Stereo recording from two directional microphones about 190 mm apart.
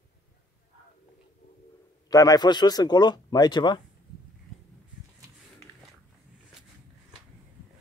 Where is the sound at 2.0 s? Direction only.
20° left (ahead or behind).